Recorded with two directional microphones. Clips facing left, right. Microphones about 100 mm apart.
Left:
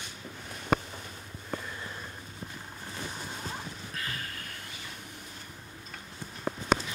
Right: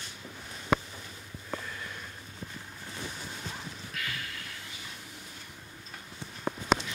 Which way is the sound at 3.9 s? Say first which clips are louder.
Even; 35° left (ahead or behind).